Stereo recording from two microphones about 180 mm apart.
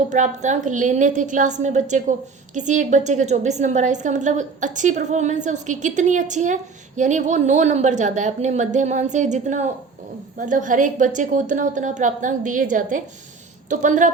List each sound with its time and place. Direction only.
0.1 s a woman's voice: 40° right (ahead or behind)